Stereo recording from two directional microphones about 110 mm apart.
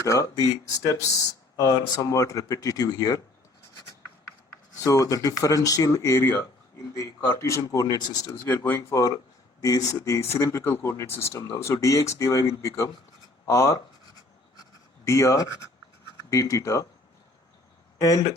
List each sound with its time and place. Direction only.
0.0 s speech: 30° left (ahead or behind)
1.5 s speech: 30° left (ahead or behind)
4.8 s speech: 30° left (ahead or behind)
8.4 s speech: 15° left (ahead or behind)
8.9 s speech: 30° left (ahead or behind)
14.5 s writing: 30° left (ahead or behind)
16.3 s speech: 30° left (ahead or behind)
17.9 s speech: 30° left (ahead or behind)